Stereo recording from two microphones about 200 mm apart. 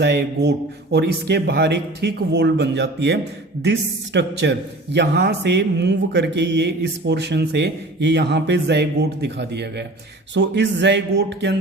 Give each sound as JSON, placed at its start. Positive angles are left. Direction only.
{"t": 0.0, "sound": "a man's voice", "side_deg": -55}